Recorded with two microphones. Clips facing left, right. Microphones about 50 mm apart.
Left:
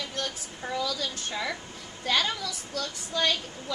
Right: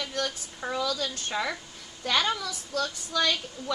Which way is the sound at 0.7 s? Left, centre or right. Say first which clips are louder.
Right 1 dB; right.